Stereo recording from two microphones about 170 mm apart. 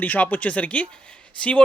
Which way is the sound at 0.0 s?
10° left (ahead or behind).